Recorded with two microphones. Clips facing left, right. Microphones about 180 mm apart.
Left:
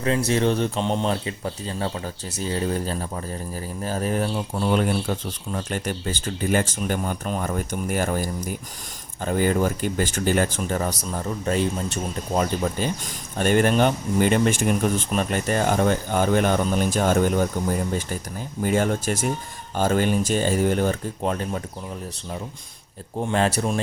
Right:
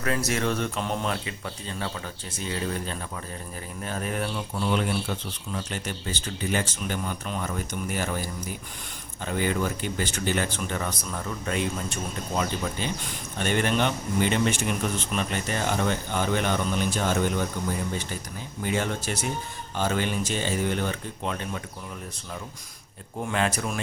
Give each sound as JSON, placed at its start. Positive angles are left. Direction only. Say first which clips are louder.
{"t": 0.3, "sound": "speech", "louder": "left 6 dB", "side_deg": 30}
{"t": 23.2, "sound": "speech", "louder": "left 5 dB", "side_deg": 35}